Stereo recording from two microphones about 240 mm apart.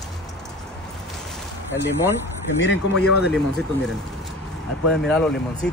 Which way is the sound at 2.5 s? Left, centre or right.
Left.